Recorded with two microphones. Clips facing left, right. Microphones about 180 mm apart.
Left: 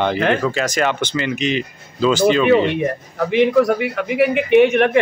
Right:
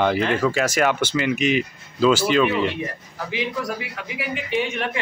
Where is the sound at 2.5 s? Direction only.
60° left (ahead or behind).